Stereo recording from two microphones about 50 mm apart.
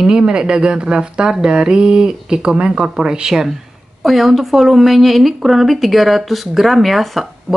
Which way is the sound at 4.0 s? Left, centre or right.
Centre.